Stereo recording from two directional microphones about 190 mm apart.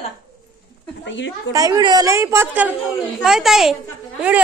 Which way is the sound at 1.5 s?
20° right (ahead or behind).